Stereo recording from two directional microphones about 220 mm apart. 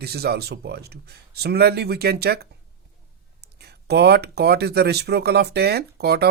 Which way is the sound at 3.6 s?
50° right (ahead or behind).